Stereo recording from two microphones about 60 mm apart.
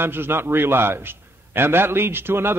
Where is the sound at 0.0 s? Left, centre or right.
Right.